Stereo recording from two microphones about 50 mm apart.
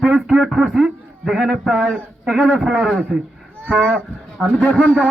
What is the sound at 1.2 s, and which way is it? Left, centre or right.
Speech, centre.